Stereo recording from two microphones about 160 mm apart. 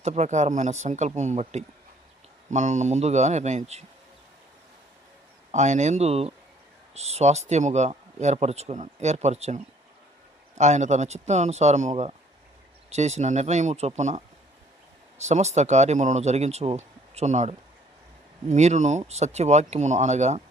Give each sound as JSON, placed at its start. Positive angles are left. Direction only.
{"t": 0.0, "sound": "speech", "side_deg": -45}
{"t": 5.5, "sound": "speech", "side_deg": -45}